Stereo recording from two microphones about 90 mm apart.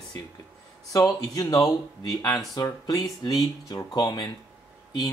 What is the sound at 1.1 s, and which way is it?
Speech, 40° left (ahead or behind).